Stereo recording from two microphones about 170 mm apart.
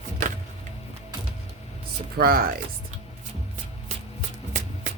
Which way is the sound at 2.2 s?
60° right (ahead or behind).